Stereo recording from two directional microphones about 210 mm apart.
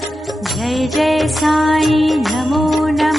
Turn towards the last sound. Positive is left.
turn(degrees=0)  # may be behind; listen again after turning